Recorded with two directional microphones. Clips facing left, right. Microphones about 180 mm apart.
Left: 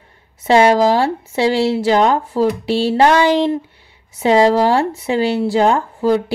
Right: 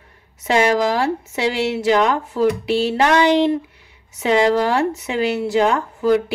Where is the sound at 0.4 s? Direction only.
30° left (ahead or behind).